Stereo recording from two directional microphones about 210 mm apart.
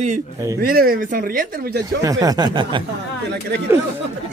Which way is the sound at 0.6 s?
45° right (ahead or behind).